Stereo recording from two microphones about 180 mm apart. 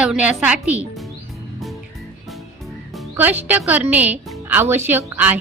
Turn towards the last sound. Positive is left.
turn(degrees=-10)  # may be behind; listen again after turning